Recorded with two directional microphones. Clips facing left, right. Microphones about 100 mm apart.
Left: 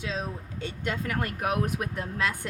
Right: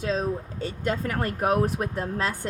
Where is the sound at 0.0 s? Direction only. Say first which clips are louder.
Right 7 dB; 40° right (ahead or behind).